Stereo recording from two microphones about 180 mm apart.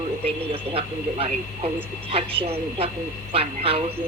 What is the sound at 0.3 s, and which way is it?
Speech, 30° right (ahead or behind).